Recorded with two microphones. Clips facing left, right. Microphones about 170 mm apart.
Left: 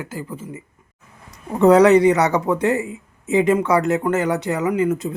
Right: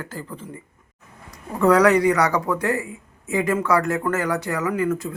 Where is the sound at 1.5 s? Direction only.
25° left (ahead or behind).